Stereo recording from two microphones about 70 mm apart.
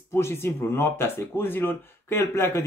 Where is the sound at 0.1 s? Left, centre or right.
Left.